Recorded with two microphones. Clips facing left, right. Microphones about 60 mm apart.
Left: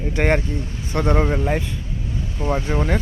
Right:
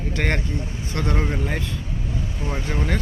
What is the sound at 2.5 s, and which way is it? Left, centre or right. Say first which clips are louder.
Speech: left 6 dB; centre.